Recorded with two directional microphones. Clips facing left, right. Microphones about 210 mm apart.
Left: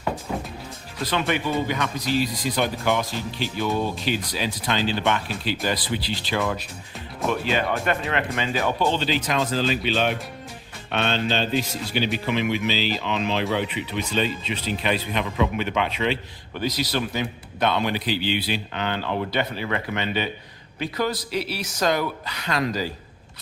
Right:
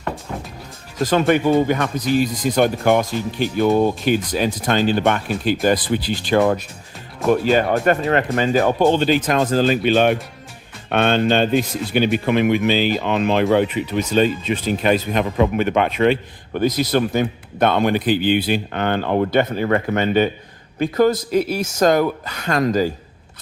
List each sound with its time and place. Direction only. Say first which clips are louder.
0.9 s speech: right 9 dB; 45° right (ahead or behind)